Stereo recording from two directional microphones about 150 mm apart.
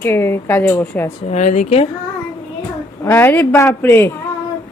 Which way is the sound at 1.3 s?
50° left (ahead or behind).